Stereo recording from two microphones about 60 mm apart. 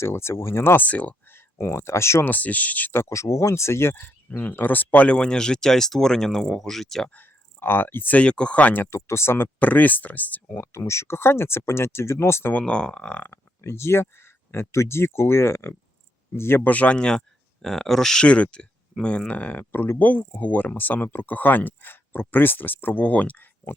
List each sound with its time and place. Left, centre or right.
0.0 s speech: left
0.9 s speech: left
1.3 s speech: left
2.2 s speech: left
3.0 s speech: left
4.3 s speech: left; by 7.1 s centre
7.1 s speech: left
8.2 s speech: centre
9.0 s speech: left
9.6 s speech: left
10.7 s speech: left
12.5 s speech: centre
13.6 s speech: left
16.6 s speech: left